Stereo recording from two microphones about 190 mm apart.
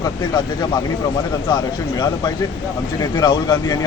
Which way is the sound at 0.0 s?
20° left (ahead or behind).